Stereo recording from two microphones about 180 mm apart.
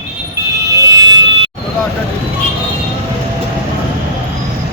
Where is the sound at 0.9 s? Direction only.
20° right (ahead or behind).